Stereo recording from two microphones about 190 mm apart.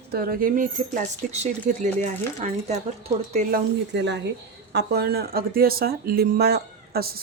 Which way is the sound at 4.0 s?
65° right (ahead or behind).